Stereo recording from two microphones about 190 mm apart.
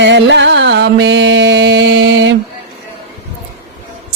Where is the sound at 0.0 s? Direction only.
70° right (ahead or behind).